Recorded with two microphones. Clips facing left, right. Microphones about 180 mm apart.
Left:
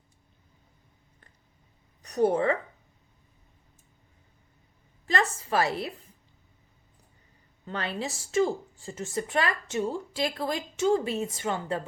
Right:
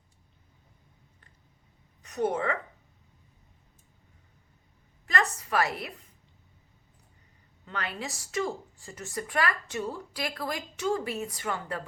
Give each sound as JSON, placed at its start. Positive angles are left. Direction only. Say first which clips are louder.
{"t": 2.0, "sound": "a woman's voice", "louder": "left 5 dB", "side_deg": 35}
{"t": 5.0, "sound": "a woman's voice", "louder": "left 2 dB", "side_deg": 30}
{"t": 7.6, "sound": "a woman's voice", "louder": "left 4 dB", "side_deg": 30}